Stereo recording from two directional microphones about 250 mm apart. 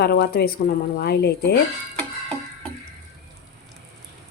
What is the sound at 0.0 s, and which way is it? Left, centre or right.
Speech, left.